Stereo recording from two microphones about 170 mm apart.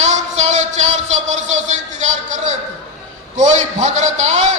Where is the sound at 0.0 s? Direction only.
40° right (ahead or behind).